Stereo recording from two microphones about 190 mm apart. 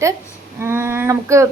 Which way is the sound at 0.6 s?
10° right (ahead or behind).